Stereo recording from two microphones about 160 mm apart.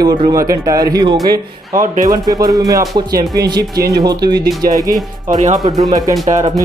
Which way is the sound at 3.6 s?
80° right.